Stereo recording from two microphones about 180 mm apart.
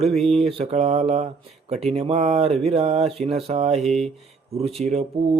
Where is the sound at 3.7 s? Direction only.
Centre (ahead or behind).